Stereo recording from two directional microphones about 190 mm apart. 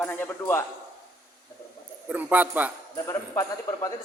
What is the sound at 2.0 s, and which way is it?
Speech, 10° right (ahead or behind).